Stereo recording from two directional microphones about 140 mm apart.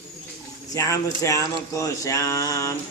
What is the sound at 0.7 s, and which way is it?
Speech, 25° left (ahead or behind).